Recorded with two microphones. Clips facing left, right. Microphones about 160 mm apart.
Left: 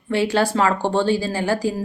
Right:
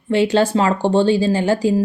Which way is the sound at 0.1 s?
20° right (ahead or behind).